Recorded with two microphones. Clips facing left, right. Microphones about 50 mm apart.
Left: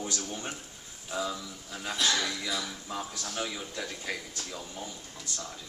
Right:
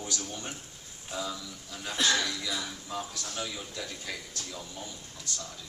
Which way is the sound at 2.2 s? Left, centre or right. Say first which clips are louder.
Left 1 dB; centre.